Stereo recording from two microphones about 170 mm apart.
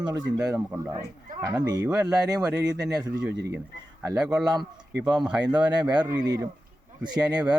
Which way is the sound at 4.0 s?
5° right (ahead or behind).